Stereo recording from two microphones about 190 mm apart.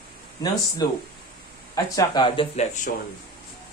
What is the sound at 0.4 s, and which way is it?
Speech, 15° left (ahead or behind).